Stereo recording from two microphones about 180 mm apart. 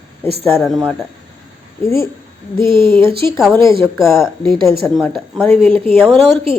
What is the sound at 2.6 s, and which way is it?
Speech, 30° right (ahead or behind).